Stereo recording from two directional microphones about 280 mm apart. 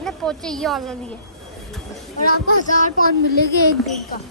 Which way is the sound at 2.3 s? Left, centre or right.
Left.